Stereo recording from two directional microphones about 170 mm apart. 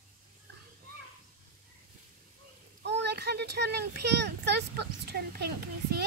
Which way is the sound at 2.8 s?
85° right.